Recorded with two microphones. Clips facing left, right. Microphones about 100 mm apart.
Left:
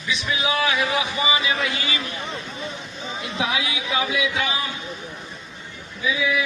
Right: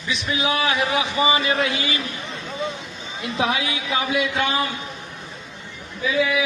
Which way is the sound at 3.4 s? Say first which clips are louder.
Right 3 dB; 35° right (ahead or behind).